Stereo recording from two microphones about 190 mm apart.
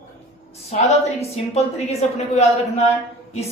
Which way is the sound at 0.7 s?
35° left (ahead or behind).